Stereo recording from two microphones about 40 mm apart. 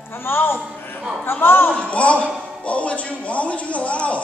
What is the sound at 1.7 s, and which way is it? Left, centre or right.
A man's voice, left.